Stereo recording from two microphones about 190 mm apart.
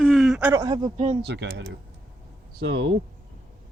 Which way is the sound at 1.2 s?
65° right (ahead or behind).